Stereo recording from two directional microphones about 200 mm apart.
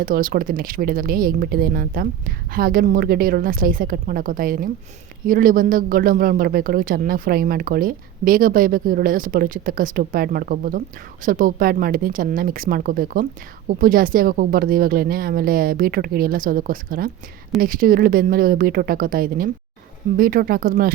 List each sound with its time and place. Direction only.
0.0 s speech: 45° right (ahead or behind)